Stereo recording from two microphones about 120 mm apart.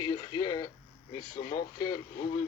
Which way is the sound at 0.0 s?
40° left (ahead or behind).